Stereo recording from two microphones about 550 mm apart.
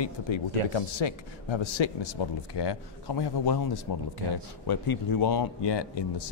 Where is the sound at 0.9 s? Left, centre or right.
Left.